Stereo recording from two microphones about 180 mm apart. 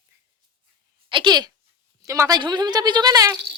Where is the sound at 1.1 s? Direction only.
25° right (ahead or behind).